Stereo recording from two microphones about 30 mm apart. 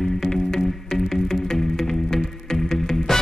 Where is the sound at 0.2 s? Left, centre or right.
Centre.